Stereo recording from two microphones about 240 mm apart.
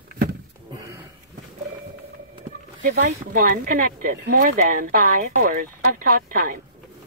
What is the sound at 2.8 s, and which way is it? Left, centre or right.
Speech, right.